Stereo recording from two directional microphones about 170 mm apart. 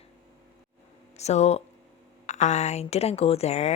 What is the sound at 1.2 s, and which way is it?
Speech, 40° left (ahead or behind).